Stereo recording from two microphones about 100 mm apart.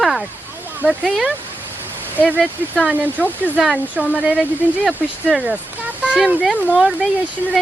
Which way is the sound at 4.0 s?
15° right (ahead or behind).